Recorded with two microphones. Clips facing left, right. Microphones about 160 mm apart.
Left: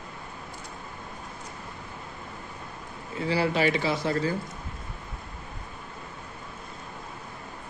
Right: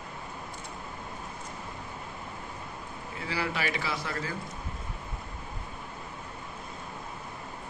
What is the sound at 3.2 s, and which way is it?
Speech, 30° left (ahead or behind).